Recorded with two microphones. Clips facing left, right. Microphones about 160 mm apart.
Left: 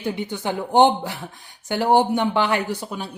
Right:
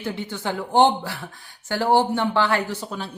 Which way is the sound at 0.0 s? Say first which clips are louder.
Left 2 dB; 15° left (ahead or behind).